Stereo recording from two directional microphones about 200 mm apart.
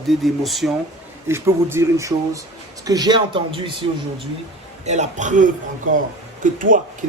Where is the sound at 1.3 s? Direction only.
15° right (ahead or behind).